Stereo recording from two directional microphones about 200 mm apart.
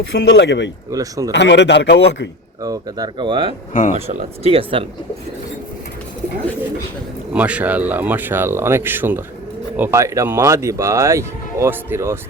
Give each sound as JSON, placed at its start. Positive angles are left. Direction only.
{"t": 0.1, "sound": "a man's voice", "side_deg": 60}
{"t": 0.9, "sound": "speech", "side_deg": -15}
{"t": 1.3, "sound": "a man's voice", "side_deg": 60}
{"t": 2.6, "sound": "speech", "side_deg": -20}
{"t": 3.7, "sound": "speech", "side_deg": 40}
{"t": 3.9, "sound": "speech", "side_deg": -30}
{"t": 7.3, "sound": "speech", "side_deg": -5}